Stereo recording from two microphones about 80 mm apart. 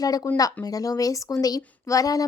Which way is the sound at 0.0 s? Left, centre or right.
Left.